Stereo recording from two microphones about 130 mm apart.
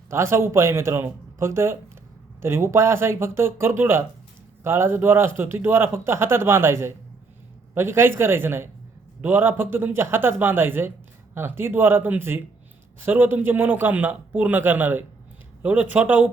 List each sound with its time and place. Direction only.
0.1 s speech: 20° right (ahead or behind)